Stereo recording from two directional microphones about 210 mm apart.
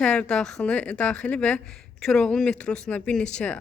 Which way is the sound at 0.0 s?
5° left (ahead or behind).